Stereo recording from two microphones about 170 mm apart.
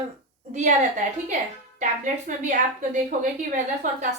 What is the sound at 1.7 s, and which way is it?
Speech, 50° right (ahead or behind).